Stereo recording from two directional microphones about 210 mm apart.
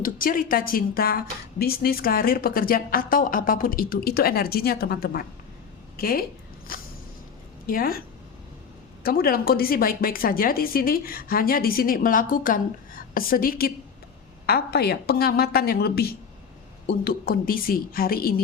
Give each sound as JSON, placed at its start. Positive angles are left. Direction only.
{"t": 0.0, "sound": "a woman's voice", "side_deg": 40}
{"t": 6.7, "sound": "a sound", "side_deg": 45}
{"t": 7.7, "sound": "a woman's voice", "side_deg": 45}
{"t": 9.0, "sound": "a woman's voice", "side_deg": 45}